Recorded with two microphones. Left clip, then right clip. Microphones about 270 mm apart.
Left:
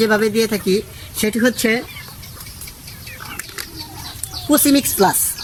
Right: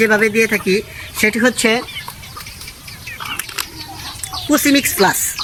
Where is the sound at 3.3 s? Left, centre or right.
Centre.